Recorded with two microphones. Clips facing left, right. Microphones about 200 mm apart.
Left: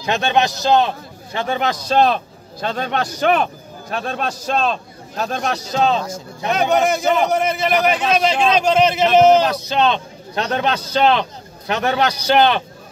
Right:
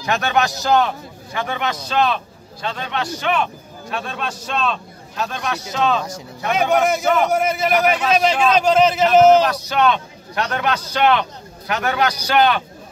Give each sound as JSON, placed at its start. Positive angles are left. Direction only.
{"t": 0.0, "sound": "a man's voice", "side_deg": 20}
{"t": 6.5, "sound": "a man's voice", "side_deg": -5}
{"t": 9.5, "sound": "a man's voice", "side_deg": 25}